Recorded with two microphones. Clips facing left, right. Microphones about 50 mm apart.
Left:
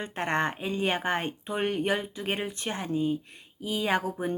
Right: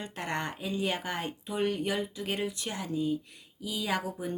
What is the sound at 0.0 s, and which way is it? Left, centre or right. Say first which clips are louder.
Speech: left 6 dB; left.